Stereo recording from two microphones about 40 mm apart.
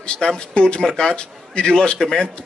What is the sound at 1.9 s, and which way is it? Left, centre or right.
Speech, centre.